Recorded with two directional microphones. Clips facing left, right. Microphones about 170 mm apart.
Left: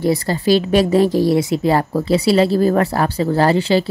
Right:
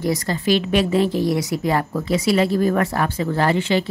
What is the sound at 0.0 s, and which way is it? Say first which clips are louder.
A woman's voice: left 4 dB; 30° left (ahead or behind).